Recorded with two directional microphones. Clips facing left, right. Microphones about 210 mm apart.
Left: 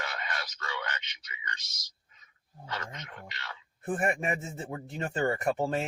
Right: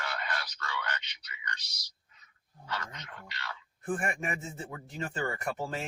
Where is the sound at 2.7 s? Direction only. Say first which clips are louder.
Left 2 dB; 20° left (ahead or behind).